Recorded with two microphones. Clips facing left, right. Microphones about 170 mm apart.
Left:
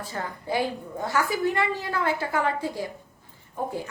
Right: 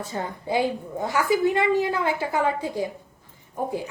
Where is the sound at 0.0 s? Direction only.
20° right (ahead or behind).